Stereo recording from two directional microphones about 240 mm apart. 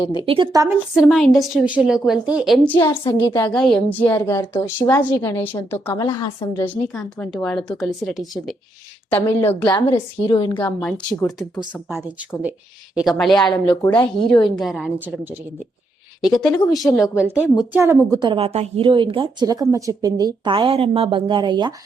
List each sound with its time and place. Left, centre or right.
0.0 s a woman's voice: centre
0.3 s a woman's voice: centre
0.9 s a woman's voice: centre
2.7 s a woman's voice: centre
10.2 s a woman's voice: centre
10.6 s a woman's voice: centre
12.4 s a woman's voice: centre